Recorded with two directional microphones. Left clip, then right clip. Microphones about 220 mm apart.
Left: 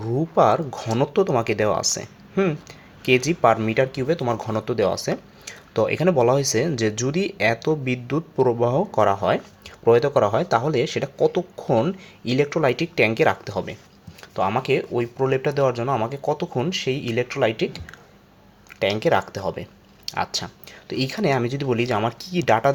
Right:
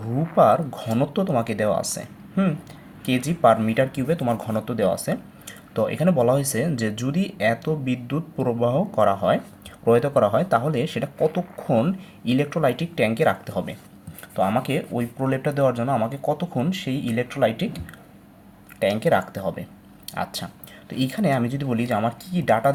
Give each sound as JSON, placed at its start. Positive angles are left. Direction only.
{"t": 0.0, "sound": "speech", "side_deg": 30}
{"t": 18.8, "sound": "speech", "side_deg": 35}